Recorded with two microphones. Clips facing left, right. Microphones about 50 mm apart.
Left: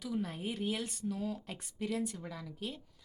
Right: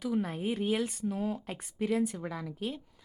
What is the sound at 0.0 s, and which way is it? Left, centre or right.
A woman's voice, right.